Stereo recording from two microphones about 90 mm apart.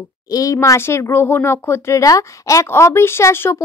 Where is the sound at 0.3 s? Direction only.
40° left (ahead or behind).